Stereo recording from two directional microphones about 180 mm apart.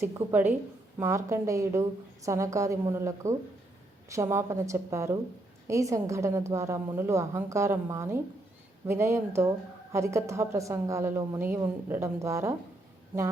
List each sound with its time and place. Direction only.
0.0 s a woman's voice: 10° right (ahead or behind)